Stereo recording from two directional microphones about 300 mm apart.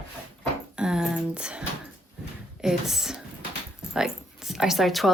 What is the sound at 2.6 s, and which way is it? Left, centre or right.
Speech, centre.